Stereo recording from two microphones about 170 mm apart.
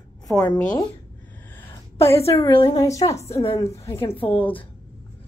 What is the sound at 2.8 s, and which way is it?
A woman's voice, 20° left (ahead or behind).